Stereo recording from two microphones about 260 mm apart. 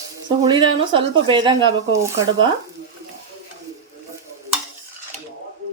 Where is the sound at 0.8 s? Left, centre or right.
Centre.